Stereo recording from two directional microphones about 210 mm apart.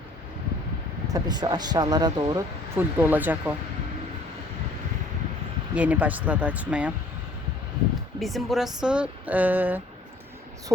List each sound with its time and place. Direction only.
1.0 s speech: 20° right (ahead or behind)
5.7 s speech: 5° right (ahead or behind)
8.2 s speech: centre (ahead or behind)